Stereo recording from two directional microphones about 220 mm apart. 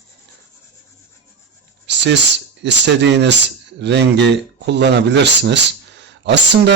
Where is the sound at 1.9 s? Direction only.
55° right (ahead or behind).